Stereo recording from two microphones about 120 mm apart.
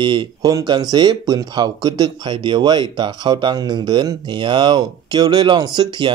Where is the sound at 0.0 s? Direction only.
40° right (ahead or behind).